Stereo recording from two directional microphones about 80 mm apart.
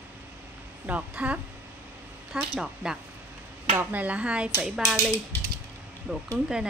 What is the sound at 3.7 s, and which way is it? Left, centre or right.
Speech, right.